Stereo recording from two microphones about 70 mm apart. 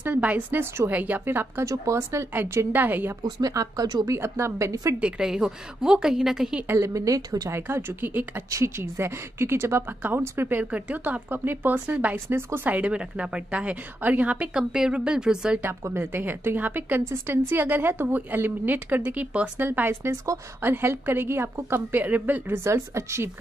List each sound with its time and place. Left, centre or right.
0.0 s a woman's voice: right
1.7 s a woman's voice: right
3.3 s speech: right
3.5 s speech: right
4.1 s a woman's voice: right
5.0 s a woman's voice: centre
6.8 s speech: right
7.6 s a woman's voice: right
8.5 s a woman's voice: right
12.3 s a woman's voice: right
12.6 s a woman's voice: right
16.0 s a woman's voice: right
22.6 s speech: right